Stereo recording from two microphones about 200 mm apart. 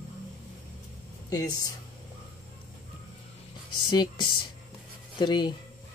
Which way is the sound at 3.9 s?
20° left (ahead or behind).